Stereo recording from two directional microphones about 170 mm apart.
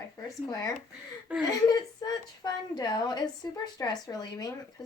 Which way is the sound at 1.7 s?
25° left (ahead or behind).